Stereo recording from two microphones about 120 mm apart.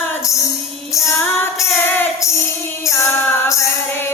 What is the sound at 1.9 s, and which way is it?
Music, 15° left (ahead or behind).